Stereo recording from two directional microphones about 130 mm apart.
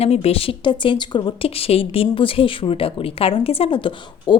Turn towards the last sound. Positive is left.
turn(degrees=40)  # may be behind; listen again after turning